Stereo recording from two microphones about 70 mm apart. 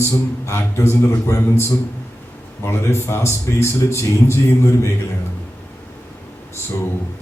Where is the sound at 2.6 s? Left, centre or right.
Left.